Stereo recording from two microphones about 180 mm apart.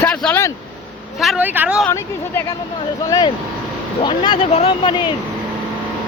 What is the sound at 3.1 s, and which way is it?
Speech, 20° left (ahead or behind).